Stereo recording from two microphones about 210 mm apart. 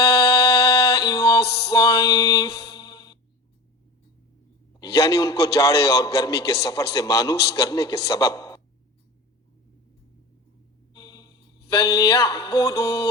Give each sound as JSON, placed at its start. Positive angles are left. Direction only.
{"t": 0.4, "sound": "a sound", "side_deg": 15}
{"t": 1.4, "sound": "music", "side_deg": 50}
{"t": 2.0, "sound": "a man's voice", "side_deg": 15}
{"t": 2.6, "sound": "mantra", "side_deg": 50}
{"t": 2.8, "sound": "music", "side_deg": 20}
{"t": 4.8, "sound": "a man's voice", "side_deg": 15}
{"t": 10.9, "sound": "mantra", "side_deg": 20}
{"t": 11.7, "sound": "a man's voice", "side_deg": 15}